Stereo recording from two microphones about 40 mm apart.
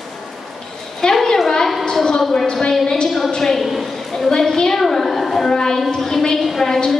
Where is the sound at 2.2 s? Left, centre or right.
Centre.